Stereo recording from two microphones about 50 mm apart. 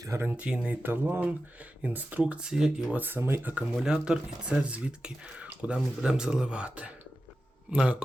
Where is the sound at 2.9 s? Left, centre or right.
Right.